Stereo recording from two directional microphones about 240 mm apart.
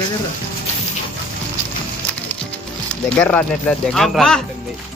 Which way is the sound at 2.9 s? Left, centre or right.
Centre.